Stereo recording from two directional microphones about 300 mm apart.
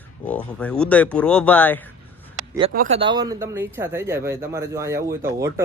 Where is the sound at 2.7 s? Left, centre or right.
Right; by 5.6 s centre.